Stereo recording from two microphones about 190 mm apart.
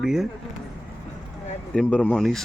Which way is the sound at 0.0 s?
5° right (ahead or behind).